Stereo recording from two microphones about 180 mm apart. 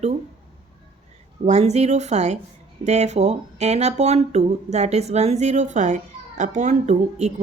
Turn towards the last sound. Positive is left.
turn(degrees=-40)  # may be behind; listen again after turning